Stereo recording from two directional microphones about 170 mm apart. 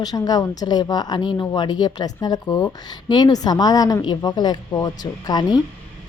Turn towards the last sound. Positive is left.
turn(degrees=25)  # may be behind; listen again after turning